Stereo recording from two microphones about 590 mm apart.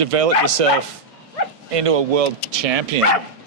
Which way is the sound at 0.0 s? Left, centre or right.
Right.